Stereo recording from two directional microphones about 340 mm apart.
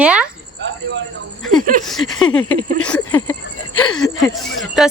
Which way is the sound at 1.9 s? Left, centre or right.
Centre.